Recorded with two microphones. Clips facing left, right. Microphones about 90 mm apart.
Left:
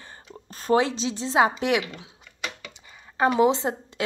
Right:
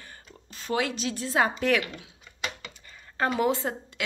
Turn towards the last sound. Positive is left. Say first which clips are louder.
# left 5 dB
turn(degrees=20)  # may be behind; listen again after turning